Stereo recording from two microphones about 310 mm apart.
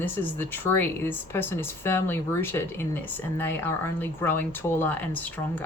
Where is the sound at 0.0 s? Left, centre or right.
Centre.